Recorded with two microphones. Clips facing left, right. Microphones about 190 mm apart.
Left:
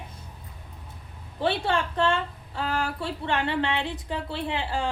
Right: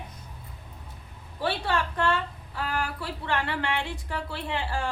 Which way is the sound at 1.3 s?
25° left (ahead or behind).